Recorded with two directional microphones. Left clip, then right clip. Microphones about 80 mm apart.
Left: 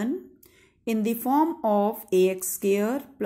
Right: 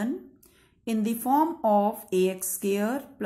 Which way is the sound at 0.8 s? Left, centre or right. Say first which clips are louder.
Left 1 dB; left.